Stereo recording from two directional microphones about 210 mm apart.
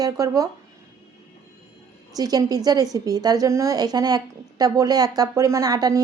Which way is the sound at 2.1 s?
15° right (ahead or behind).